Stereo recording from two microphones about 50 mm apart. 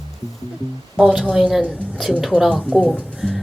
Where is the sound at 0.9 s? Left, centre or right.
Centre.